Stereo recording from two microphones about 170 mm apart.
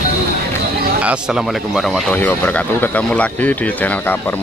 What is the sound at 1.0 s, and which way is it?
Speech, 5° right (ahead or behind).